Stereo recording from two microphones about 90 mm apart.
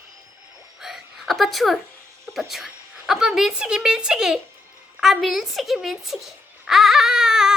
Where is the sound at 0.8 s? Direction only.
5° right (ahead or behind).